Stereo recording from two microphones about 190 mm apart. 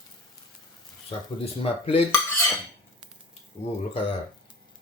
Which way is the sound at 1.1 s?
30° left (ahead or behind).